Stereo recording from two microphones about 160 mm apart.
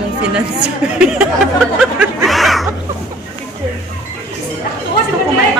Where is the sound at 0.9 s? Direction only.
5° right (ahead or behind).